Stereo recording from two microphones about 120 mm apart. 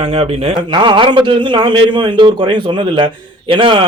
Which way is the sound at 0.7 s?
40° right (ahead or behind).